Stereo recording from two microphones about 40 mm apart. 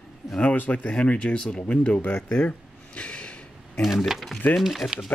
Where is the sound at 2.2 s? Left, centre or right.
Left.